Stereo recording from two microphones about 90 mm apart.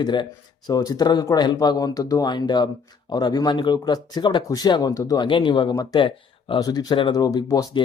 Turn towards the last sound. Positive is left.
turn(degrees=40)  # may be behind; listen again after turning